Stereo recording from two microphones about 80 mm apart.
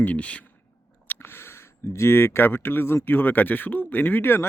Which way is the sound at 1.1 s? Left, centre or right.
Left.